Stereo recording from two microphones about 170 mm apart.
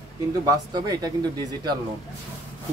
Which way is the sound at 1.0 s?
25° right (ahead or behind).